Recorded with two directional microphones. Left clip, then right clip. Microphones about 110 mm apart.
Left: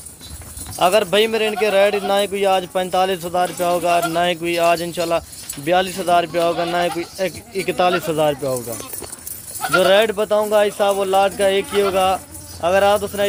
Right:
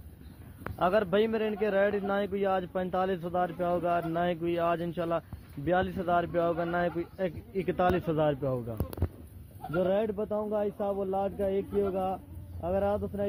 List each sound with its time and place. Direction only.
0.8 s a man's voice: 20° left (ahead or behind)
9.8 s a man's voice: 20° left (ahead or behind)